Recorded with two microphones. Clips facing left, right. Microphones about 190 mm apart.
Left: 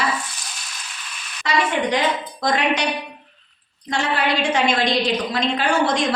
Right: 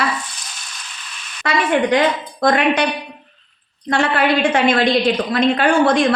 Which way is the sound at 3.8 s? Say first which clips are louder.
Right 5 dB; 55° right (ahead or behind).